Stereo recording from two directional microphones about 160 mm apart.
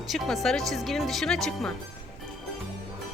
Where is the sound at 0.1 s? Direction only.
Centre (ahead or behind).